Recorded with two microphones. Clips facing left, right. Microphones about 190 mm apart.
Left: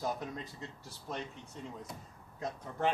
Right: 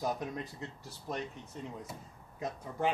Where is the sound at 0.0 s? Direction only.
15° right (ahead or behind).